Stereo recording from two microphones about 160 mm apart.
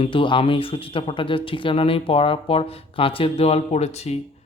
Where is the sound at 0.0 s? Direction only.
35° left (ahead or behind).